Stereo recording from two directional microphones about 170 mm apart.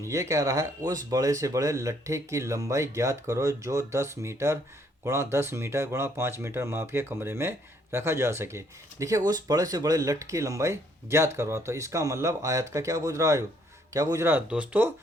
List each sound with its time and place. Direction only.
0.0 s speech: 15° right (ahead or behind)